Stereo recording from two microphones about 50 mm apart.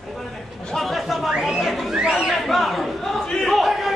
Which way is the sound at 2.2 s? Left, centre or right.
Centre.